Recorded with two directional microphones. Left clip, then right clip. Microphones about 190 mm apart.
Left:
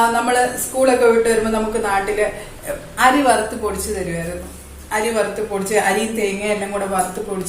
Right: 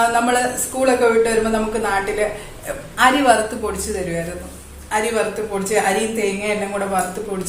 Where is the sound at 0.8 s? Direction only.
Centre (ahead or behind).